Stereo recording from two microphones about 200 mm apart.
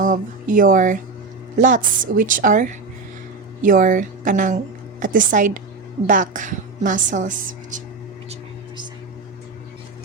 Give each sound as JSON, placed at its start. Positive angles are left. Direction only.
{"t": 0.0, "sound": "a woman's voice", "side_deg": -40}